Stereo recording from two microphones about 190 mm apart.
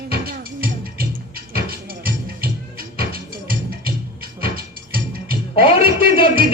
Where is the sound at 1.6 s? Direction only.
55° right (ahead or behind).